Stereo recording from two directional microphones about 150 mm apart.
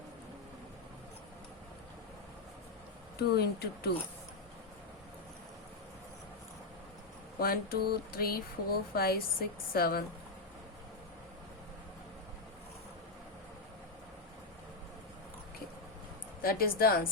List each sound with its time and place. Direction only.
3.2 s speech: 90° left
7.3 s speech: 85° left
16.4 s a woman's voice: 80° left